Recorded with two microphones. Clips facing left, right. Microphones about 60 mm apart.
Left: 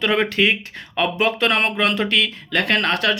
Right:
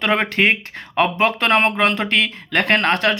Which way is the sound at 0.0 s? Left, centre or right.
Right.